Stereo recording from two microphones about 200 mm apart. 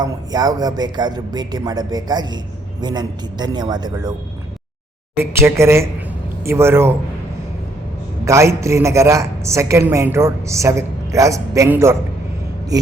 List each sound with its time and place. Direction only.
0.0 s speech: 20° right (ahead or behind)
5.1 s a woman's voice: 10° right (ahead or behind)
8.2 s a woman's voice: 15° right (ahead or behind)